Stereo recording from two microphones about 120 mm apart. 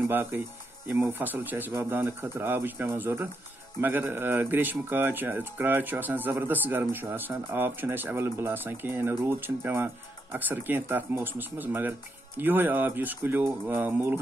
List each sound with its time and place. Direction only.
0.1 s speech: 15° right (ahead or behind)